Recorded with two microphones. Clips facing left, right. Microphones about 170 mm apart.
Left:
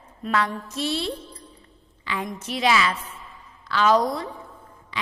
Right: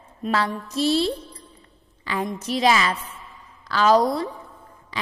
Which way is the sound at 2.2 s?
35° right (ahead or behind).